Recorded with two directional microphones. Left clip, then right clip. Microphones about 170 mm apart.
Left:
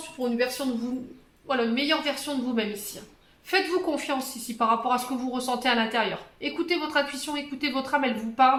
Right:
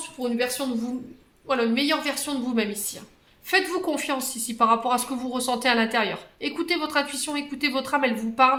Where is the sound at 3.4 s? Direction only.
35° right (ahead or behind).